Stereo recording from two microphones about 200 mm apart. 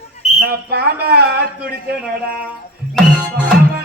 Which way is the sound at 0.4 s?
55° right (ahead or behind).